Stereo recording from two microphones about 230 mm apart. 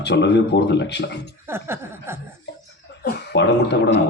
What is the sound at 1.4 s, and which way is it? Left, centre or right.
Speech, centre.